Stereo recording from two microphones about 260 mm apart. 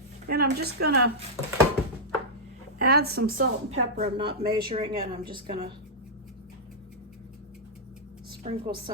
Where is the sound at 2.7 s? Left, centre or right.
Right; by 5.5 s centre.